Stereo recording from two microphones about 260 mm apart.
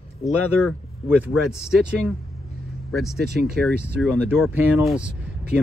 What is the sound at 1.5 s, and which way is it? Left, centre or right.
Speech, centre.